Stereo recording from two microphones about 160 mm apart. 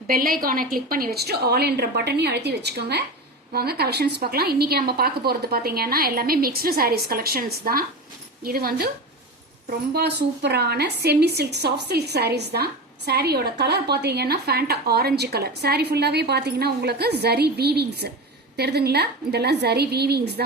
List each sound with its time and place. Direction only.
0.1 s speech: 65° right (ahead or behind); by 3.0 s 90° right
3.5 s a woman's voice: 80° right
9.6 s speech: 85° right